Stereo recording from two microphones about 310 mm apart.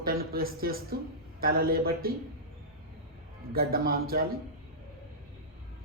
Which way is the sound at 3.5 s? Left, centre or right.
Right.